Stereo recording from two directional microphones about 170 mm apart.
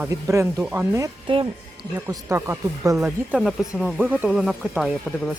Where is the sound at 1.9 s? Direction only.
15° right (ahead or behind).